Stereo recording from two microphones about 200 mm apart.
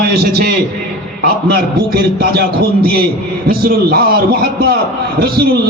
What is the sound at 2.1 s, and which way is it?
A man's voice, 50° right (ahead or behind).